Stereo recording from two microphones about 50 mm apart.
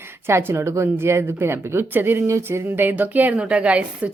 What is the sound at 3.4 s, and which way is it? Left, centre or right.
Speech, right.